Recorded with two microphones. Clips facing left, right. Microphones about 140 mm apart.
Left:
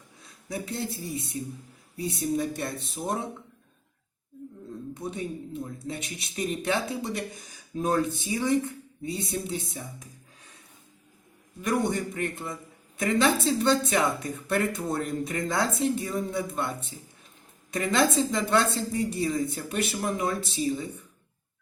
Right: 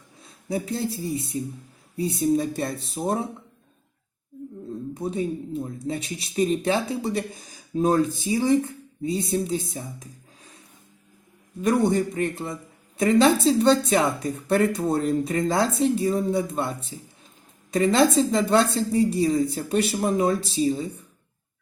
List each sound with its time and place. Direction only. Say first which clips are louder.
0.4 s speech: right 6 dB; 30° right (ahead or behind)
4.9 s speech: right 7 dB; 35° right (ahead or behind)
11.6 s speech: right 6 dB; 35° right (ahead or behind)